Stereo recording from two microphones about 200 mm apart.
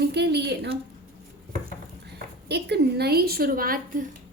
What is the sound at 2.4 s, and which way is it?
A woman's voice, 55° right (ahead or behind).